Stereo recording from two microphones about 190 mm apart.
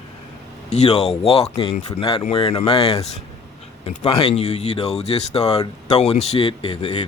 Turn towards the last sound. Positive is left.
turn(degrees=30)  # may be behind; listen again after turning